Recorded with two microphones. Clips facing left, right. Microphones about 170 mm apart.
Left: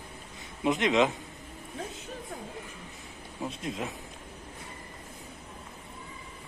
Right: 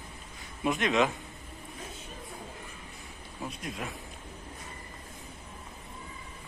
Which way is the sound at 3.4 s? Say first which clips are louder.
Left 4 dB; 25° left (ahead or behind).